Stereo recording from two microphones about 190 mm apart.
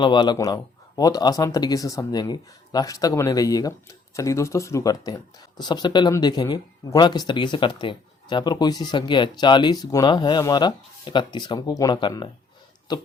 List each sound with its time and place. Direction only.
0.0 s speech: 25° left (ahead or behind)